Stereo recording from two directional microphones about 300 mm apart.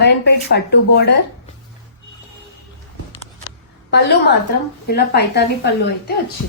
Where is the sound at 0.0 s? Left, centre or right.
Left.